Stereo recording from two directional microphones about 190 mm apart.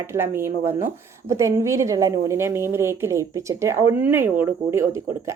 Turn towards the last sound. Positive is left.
turn(degrees=-15)  # may be behind; listen again after turning